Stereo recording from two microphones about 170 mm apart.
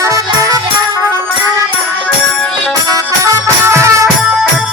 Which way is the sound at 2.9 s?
15° right (ahead or behind).